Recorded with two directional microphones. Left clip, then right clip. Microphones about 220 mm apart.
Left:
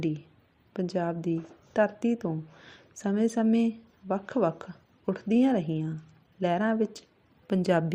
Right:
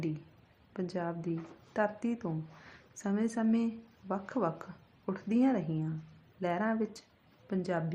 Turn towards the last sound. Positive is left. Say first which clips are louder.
# left 9 dB
turn(degrees=35)  # may be behind; listen again after turning